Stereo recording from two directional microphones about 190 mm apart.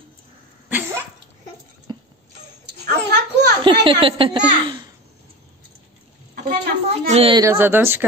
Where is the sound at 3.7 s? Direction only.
25° right (ahead or behind).